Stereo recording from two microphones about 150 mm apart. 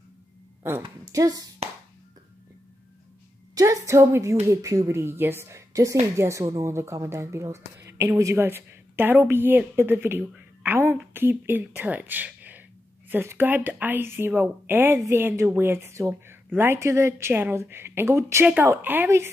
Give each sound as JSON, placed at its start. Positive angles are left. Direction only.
{"t": 1.1, "sound": "a woman's voice", "side_deg": -25}
{"t": 3.5, "sound": "a woman's voice", "side_deg": -20}